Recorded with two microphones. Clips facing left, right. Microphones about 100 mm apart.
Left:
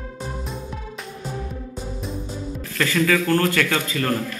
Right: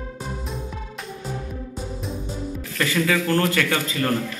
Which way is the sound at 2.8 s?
15° right (ahead or behind).